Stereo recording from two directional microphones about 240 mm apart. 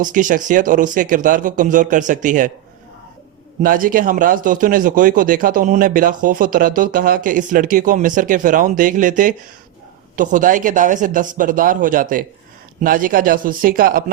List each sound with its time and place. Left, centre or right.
0.0 s speech: right
3.6 s speech: right